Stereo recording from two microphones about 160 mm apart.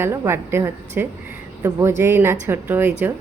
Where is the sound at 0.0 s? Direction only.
15° right (ahead or behind).